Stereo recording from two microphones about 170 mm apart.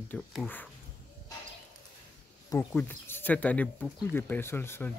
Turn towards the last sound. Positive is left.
turn(degrees=15)  # may be behind; listen again after turning